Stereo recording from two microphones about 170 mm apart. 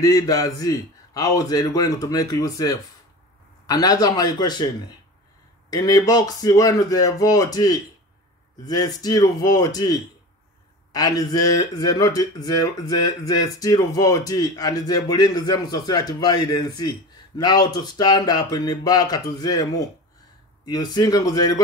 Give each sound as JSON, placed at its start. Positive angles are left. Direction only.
{"t": 0.0, "sound": "speech", "side_deg": 20}
{"t": 5.7, "sound": "speech", "side_deg": 20}